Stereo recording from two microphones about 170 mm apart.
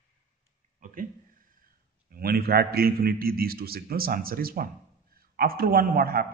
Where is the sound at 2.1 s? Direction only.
65° right (ahead or behind).